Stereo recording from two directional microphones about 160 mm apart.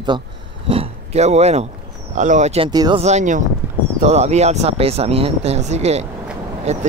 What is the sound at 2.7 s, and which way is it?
Speech, 25° right (ahead or behind).